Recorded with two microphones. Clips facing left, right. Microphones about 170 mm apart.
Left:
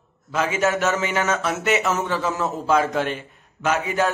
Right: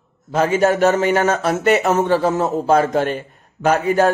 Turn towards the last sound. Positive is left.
turn(degrees=-45)  # may be behind; listen again after turning